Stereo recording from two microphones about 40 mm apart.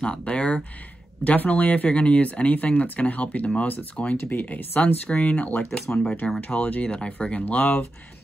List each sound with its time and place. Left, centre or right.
0.0 s speech: left
1.2 s speech: left
4.2 s speech: left
5.7 s speech: centre
6.5 s speech: left
6.8 s speech: left
7.4 s speech: left